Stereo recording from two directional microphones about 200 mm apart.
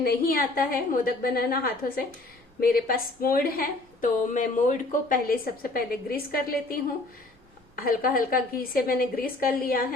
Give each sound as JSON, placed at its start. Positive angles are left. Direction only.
{"t": 0.0, "sound": "a woman's voice", "side_deg": 50}
{"t": 7.8, "sound": "a woman's voice", "side_deg": 45}